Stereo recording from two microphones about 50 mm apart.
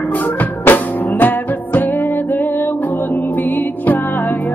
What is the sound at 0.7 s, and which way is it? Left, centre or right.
Music, left.